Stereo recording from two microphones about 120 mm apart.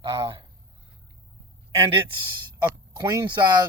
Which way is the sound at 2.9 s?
35° right (ahead or behind).